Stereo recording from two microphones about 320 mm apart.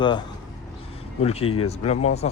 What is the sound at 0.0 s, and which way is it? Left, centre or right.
Speech, centre.